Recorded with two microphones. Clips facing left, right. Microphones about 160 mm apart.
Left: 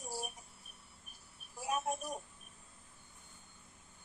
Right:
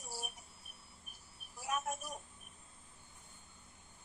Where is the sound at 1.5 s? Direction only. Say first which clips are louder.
Left 3 dB; 20° left (ahead or behind).